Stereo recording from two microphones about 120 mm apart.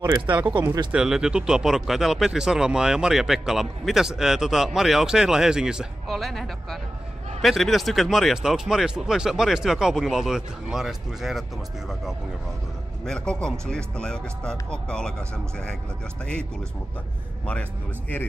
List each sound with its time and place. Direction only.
0.5 s speech: 40° right (ahead or behind)
0.9 s speech: 5° right (ahead or behind)
13.0 s speech: 5° left (ahead or behind)